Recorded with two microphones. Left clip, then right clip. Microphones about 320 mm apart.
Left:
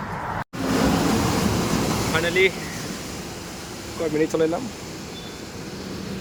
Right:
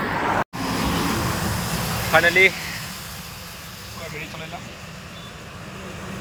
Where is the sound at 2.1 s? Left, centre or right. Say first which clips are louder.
Right 6 dB; centre.